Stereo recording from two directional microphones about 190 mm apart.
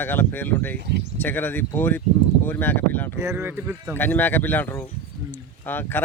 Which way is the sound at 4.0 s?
10° left (ahead or behind).